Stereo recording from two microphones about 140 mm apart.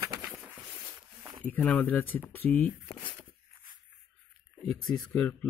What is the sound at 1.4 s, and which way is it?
Speech, 10° left (ahead or behind).